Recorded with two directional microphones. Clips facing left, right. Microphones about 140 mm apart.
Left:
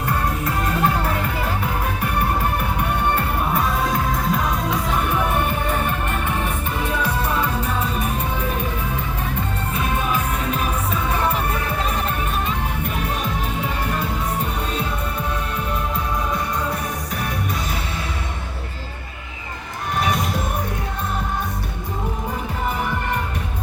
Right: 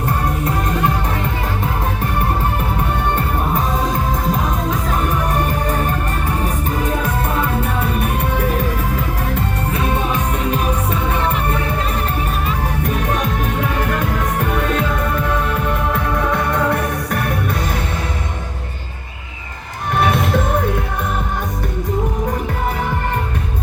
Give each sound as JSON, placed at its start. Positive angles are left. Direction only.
{"t": 4.7, "sound": "music", "side_deg": -40}
{"t": 7.6, "sound": "music", "side_deg": -65}
{"t": 14.4, "sound": "music", "side_deg": -90}
{"t": 20.0, "sound": "music", "side_deg": -55}